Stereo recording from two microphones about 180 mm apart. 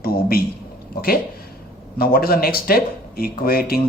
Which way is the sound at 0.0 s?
55° left (ahead or behind).